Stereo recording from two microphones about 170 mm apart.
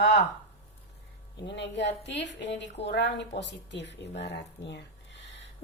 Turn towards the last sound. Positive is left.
turn(degrees=90)